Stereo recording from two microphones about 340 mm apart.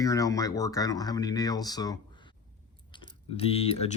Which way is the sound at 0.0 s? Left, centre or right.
Centre.